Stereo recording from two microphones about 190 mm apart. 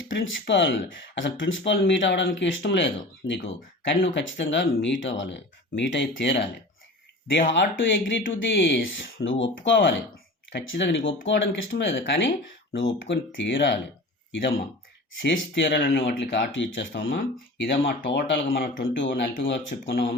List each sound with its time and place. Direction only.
0.1 s speech: 75° left (ahead or behind)
15.2 s speech: 70° left (ahead or behind)
17.0 s speech: 50° left (ahead or behind)
18.3 s speech: 50° left (ahead or behind)
18.9 s speech: 70° left (ahead or behind)
19.2 s speech: 55° left (ahead or behind)